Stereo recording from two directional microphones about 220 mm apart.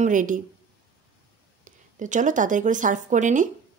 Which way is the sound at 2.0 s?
35° right (ahead or behind).